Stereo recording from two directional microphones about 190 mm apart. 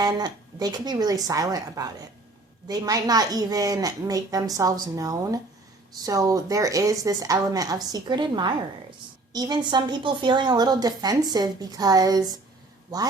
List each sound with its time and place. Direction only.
0.0 s a woman's voice: 20° right (ahead or behind)